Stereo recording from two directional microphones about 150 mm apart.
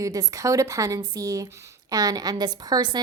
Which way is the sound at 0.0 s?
25° right (ahead or behind).